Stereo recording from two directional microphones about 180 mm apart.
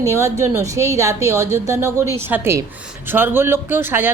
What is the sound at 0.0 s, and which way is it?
Speech, 15° right (ahead or behind).